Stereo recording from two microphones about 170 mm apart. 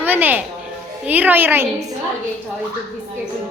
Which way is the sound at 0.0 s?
10° right (ahead or behind).